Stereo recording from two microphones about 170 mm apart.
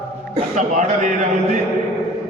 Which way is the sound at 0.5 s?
45° right (ahead or behind).